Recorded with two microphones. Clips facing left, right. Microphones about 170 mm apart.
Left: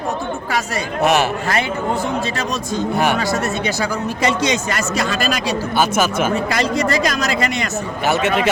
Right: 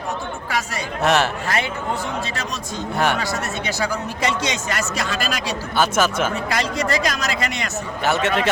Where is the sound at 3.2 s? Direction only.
40° left (ahead or behind).